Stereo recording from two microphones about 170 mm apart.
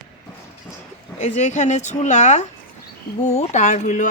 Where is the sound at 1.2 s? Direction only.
40° left (ahead or behind).